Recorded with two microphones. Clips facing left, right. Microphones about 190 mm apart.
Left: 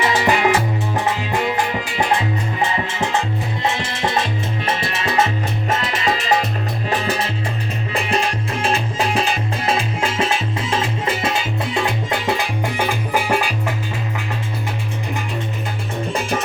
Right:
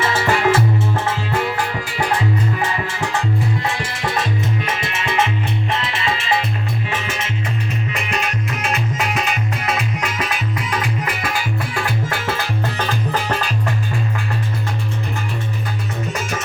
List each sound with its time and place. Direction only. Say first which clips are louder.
0.0 s music: left 1 dB; 15° left (ahead or behind)
2.8 s salsa music: left 1 dB; 20° left (ahead or behind); by 6.4 s 40° left (ahead or behind)
6.8 s music: left 4 dB; 35° left (ahead or behind); by 13.7 s 10° left (ahead or behind)